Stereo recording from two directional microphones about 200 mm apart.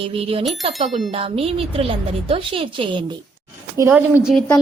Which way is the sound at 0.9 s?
Centre (ahead or behind).